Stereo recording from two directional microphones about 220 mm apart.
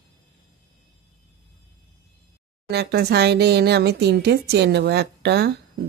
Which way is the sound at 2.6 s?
50° right (ahead or behind).